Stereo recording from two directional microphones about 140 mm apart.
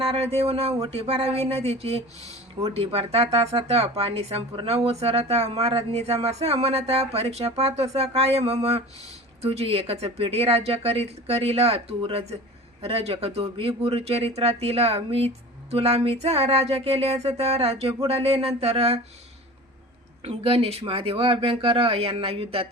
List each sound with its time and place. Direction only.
0.0 s speech: 45° right (ahead or behind)
20.2 s speech: 45° right (ahead or behind)